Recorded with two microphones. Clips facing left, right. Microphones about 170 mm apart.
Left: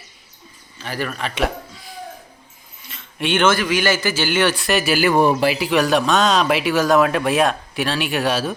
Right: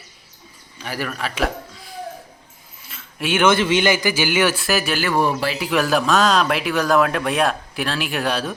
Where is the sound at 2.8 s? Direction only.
5° right (ahead or behind).